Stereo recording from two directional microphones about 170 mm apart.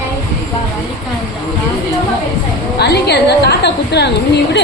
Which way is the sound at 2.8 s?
75° left (ahead or behind).